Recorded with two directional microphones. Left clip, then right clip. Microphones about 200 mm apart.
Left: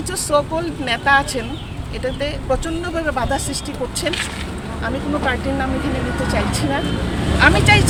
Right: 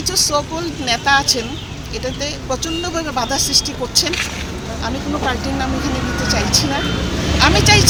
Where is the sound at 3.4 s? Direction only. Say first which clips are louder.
Right 11 dB; 25° left (ahead or behind).